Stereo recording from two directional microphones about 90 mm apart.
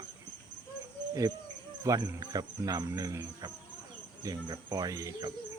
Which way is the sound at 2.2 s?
50° right (ahead or behind).